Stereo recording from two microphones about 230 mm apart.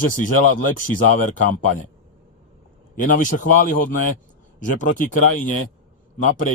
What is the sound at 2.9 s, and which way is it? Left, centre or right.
Speech, left.